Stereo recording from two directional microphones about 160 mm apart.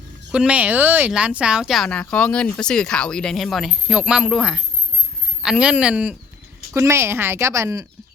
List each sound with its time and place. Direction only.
0.3 s speech: 5° right (ahead or behind)